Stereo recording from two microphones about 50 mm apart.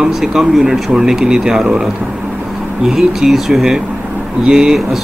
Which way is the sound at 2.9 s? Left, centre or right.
Centre.